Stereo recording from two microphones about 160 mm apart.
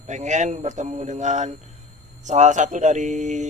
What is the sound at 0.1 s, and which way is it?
A man's voice, 50° right (ahead or behind).